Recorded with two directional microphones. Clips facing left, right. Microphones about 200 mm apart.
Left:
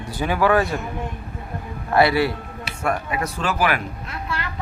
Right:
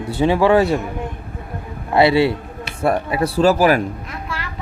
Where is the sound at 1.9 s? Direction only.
25° right (ahead or behind).